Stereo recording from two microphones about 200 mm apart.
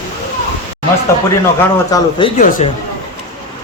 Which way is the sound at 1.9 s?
25° left (ahead or behind).